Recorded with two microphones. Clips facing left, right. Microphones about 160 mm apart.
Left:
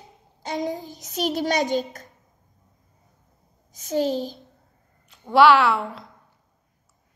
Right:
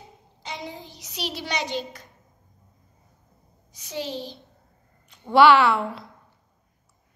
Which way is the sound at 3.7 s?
45° left (ahead or behind).